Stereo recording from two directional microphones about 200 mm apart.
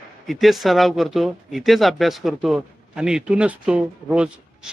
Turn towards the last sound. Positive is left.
turn(degrees=-5)  # may be behind; listen again after turning